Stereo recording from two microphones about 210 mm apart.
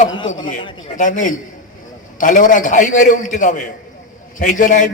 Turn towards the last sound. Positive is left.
turn(degrees=40)  # may be behind; listen again after turning